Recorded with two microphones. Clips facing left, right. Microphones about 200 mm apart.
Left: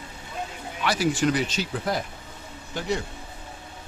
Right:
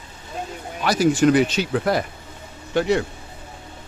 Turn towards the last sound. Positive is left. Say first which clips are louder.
# right 9 dB
turn(degrees=-65)  # may be behind; listen again after turning